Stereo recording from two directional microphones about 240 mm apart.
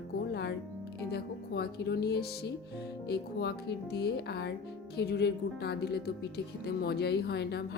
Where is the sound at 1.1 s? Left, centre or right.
Left.